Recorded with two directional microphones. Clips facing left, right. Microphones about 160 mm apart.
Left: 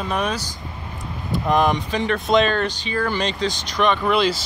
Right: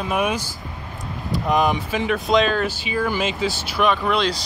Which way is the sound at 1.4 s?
Centre (ahead or behind).